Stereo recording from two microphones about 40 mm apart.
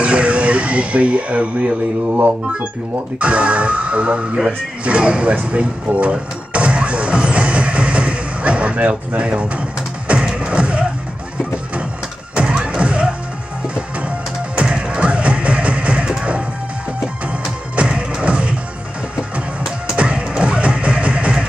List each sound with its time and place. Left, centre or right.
0.0 s a sound: right
3.2 s speech: right
6.1 s music: right
9.2 s speech: right
10.0 s music: right
12.4 s music: right
14.6 s music: right
17.7 s music: right
20.0 s music: right